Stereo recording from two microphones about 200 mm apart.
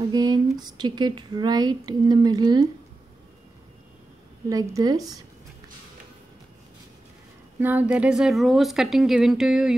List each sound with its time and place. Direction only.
0.1 s speech: 20° right (ahead or behind)
4.5 s speech: 20° right (ahead or behind)
7.6 s speech: 10° right (ahead or behind)